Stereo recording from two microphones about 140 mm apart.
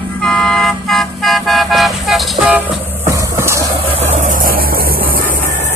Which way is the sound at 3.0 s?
20° right (ahead or behind).